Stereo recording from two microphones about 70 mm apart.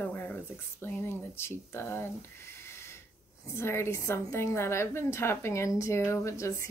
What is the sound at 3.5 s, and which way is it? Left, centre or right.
A woman's voice, left.